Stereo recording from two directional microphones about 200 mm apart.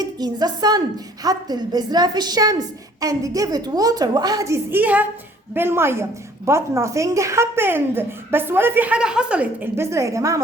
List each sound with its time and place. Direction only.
0.0 s a woman's voice: 20° right (ahead or behind)